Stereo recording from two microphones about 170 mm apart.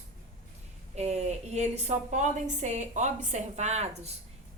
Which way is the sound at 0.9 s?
40° right (ahead or behind).